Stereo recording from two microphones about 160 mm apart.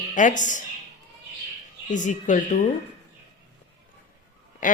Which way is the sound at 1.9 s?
50° left (ahead or behind).